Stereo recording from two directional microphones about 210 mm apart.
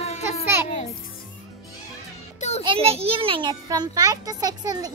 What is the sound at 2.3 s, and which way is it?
Music, 35° left (ahead or behind).